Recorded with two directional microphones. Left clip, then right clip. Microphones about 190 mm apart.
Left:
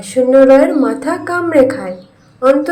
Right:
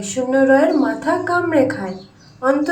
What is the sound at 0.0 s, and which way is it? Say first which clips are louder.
A woman's voice: left 8 dB; 15° left (ahead or behind).